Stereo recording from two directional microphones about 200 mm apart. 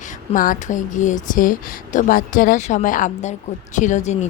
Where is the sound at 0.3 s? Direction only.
40° left (ahead or behind).